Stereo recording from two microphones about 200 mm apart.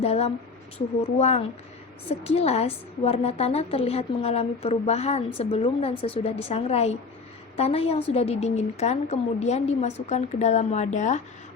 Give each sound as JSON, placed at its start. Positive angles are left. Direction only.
{"t": 0.0, "sound": "a woman's voice", "side_deg": 30}